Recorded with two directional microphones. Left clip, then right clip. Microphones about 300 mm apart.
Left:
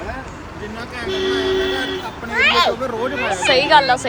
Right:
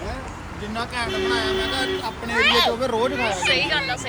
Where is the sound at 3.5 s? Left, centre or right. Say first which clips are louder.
Left 13 dB; left.